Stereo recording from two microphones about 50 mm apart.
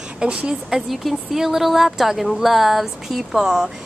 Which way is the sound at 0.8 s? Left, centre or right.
Centre.